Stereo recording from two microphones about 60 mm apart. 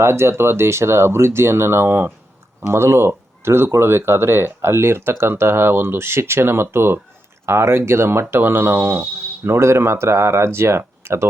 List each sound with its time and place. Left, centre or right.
0.0 s speech: right